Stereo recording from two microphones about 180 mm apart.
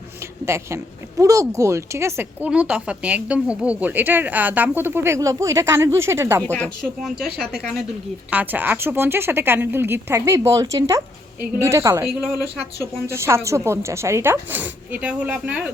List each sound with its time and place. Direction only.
0.4 s speech: 15° right (ahead or behind)
6.4 s a woman's voice: 5° left (ahead or behind)
8.3 s speech: 10° right (ahead or behind)
13.1 s speech: 15° right (ahead or behind)